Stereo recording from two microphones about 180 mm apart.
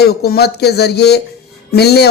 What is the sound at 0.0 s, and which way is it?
Speech, 60° left (ahead or behind).